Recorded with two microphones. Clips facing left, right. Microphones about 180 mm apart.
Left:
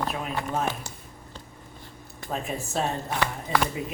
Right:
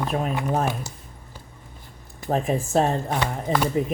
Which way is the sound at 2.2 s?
50° right (ahead or behind).